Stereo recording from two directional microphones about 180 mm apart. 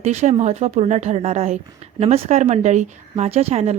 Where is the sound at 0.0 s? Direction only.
40° right (ahead or behind).